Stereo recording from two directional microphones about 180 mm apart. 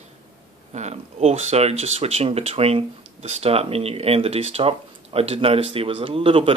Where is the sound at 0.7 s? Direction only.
40° right (ahead or behind).